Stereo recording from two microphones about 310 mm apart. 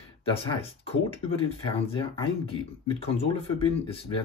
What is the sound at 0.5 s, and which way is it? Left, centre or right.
Speech, centre.